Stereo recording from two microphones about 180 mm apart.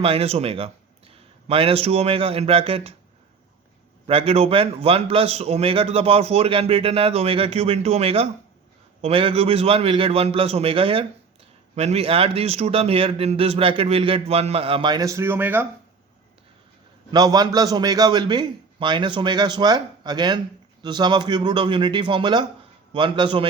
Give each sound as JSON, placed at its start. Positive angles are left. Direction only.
{"t": 0.0, "sound": "speech", "side_deg": -35}
{"t": 4.0, "sound": "a man's voice", "side_deg": -30}
{"t": 17.1, "sound": "a man's voice", "side_deg": -20}